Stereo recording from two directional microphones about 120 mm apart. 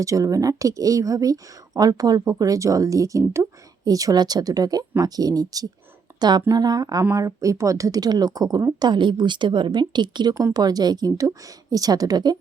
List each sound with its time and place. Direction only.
0.0 s speech: 25° right (ahead or behind)